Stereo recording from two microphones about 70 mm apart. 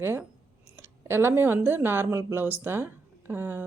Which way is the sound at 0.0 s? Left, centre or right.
Right.